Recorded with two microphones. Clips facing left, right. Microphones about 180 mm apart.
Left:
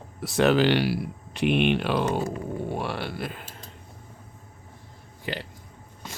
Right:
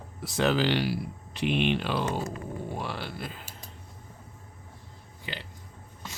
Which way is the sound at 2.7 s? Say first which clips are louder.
Left 5 dB; 65° left (ahead or behind).